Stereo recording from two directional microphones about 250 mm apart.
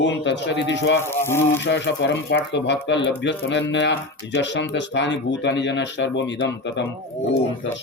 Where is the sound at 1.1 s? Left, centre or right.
Centre.